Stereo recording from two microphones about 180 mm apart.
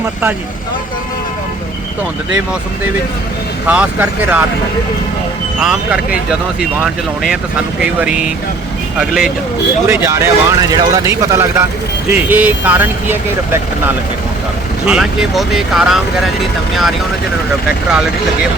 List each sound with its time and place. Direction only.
3.7 s speech: 10° right (ahead or behind)
5.5 s speech: 5° right (ahead or behind)
9.8 s speech: 15° right (ahead or behind)